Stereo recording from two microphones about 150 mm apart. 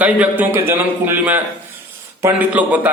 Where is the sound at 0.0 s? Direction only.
10° right (ahead or behind).